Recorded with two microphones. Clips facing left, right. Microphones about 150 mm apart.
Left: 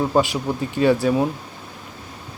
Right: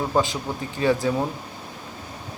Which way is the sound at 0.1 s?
15° left (ahead or behind).